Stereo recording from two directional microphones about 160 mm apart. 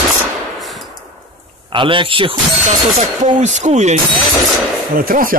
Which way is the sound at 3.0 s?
45° right (ahead or behind).